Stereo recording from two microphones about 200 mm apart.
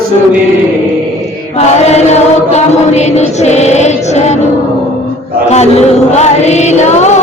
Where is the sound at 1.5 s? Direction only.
35° left (ahead or behind).